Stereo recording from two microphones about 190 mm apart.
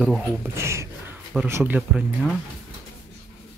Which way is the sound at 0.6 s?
15° right (ahead or behind).